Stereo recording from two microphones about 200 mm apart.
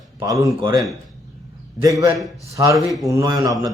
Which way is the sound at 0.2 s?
15° right (ahead or behind).